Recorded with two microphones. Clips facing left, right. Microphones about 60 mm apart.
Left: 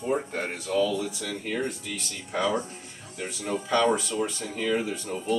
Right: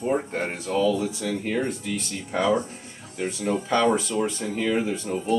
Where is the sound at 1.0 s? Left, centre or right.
Centre.